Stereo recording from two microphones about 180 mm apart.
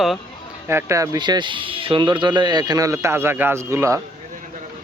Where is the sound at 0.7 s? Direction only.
15° right (ahead or behind).